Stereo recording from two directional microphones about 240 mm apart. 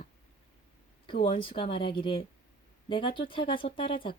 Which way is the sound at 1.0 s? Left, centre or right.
Left.